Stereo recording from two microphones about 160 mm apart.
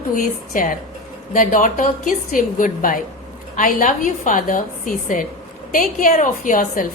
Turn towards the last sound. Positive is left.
turn(degrees=55)  # may be behind; listen again after turning